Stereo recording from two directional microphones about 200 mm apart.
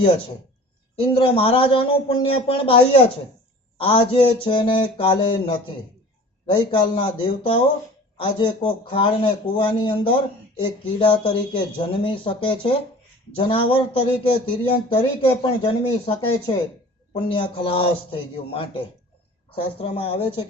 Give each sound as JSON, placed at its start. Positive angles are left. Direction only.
{"t": 0.9, "sound": "speech", "side_deg": 25}